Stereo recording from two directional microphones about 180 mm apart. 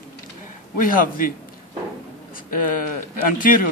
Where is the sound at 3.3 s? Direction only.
50° left (ahead or behind).